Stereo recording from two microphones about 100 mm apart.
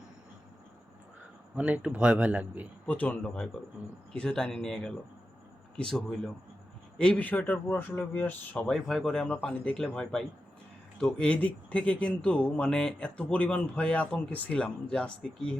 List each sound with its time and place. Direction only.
1.5 s a man's voice: 15° right (ahead or behind)
2.8 s speech: 15° left (ahead or behind)